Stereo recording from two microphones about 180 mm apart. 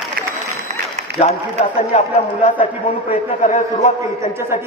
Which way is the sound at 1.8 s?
35° left (ahead or behind).